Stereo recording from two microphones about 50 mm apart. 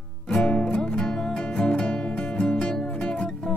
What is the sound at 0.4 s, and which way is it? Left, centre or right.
Music, left.